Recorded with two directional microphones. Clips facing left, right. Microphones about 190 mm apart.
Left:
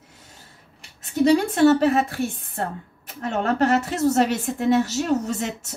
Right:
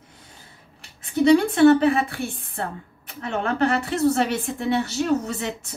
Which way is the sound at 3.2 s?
40° left (ahead or behind).